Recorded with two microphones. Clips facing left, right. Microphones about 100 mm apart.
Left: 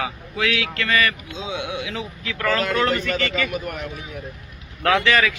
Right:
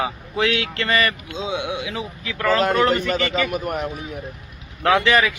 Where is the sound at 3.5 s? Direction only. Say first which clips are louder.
Right 4 dB; 40° right (ahead or behind).